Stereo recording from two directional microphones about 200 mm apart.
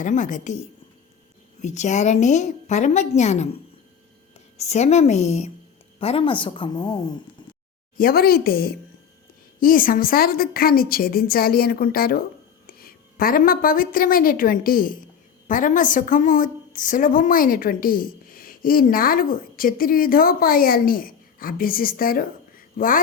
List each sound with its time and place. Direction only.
0.0 s a woman's voice: 40° left (ahead or behind)
1.6 s a woman's voice: 35° left (ahead or behind)
7.9 s a woman's voice: 50° left (ahead or behind)